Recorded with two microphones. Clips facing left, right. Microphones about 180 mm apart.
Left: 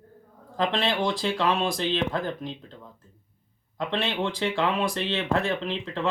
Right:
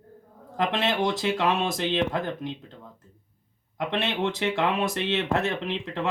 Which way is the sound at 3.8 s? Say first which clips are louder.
Right 1 dB; 20° right (ahead or behind).